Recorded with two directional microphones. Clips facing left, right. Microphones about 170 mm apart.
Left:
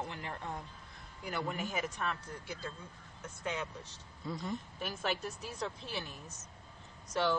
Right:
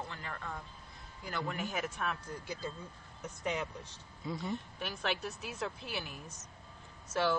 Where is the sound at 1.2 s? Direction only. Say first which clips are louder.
Left 1 dB; 10° left (ahead or behind).